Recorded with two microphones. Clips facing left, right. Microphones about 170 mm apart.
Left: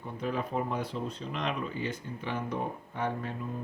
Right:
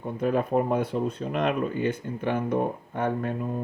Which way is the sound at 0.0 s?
50° right (ahead or behind).